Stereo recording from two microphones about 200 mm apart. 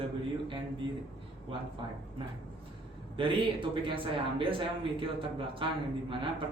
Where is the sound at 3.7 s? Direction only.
25° right (ahead or behind).